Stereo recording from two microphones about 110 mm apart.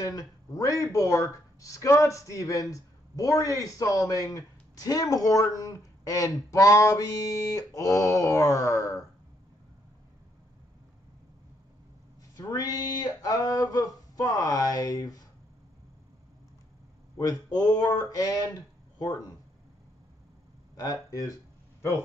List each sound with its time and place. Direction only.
0.0 s a man's voice: 30° left (ahead or behind)
6.5 s mantra: 30° left (ahead or behind)
12.4 s speech: 35° left (ahead or behind)
17.2 s speech: 35° left (ahead or behind)
20.7 s speech: 35° left (ahead or behind)